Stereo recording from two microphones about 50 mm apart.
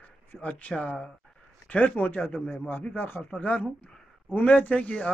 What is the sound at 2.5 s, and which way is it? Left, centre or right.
Speech, left.